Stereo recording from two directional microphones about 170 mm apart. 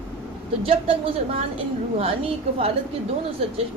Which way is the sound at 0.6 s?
35° right (ahead or behind).